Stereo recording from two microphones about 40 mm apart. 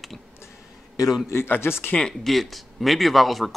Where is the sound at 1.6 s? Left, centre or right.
Left.